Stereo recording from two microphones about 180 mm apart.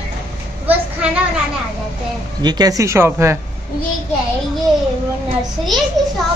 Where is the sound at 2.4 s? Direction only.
25° right (ahead or behind).